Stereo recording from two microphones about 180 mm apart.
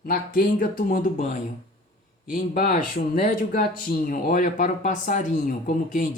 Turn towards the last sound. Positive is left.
turn(degrees=45)  # may be behind; listen again after turning